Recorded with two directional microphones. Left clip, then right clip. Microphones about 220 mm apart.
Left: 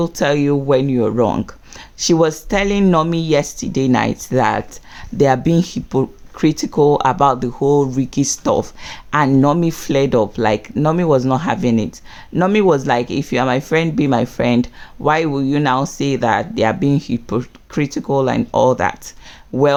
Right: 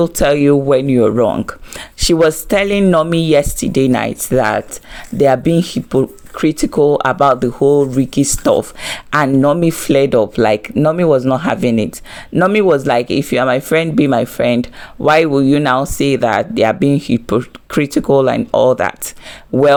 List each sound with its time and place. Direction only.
0.0 s speech: 20° right (ahead or behind)